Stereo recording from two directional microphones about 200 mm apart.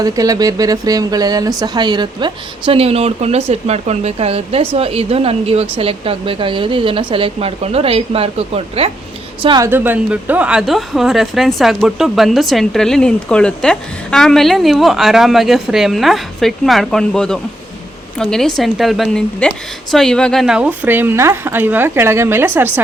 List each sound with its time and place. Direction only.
0.0 s speech: 20° right (ahead or behind)
9.6 s a woman's voice: 10° right (ahead or behind)